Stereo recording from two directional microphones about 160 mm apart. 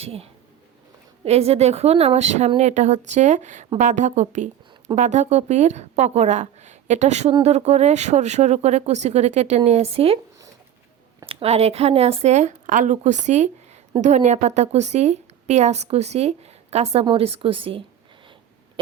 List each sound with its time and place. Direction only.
0.0 s a woman's voice: 40° right (ahead or behind)
11.3 s a woman's voice: 35° right (ahead or behind)